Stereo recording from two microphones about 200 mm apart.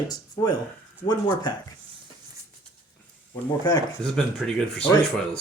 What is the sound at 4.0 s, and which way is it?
Speech, 5° left (ahead or behind).